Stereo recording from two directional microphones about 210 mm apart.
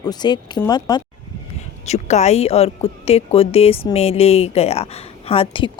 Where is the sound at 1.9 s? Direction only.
30° left (ahead or behind).